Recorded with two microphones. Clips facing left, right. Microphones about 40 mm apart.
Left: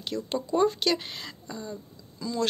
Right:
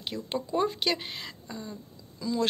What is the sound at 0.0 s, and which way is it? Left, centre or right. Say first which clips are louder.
Speech: left 2 dB; centre.